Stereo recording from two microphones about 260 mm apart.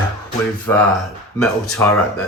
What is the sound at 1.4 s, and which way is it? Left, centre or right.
Speech, centre.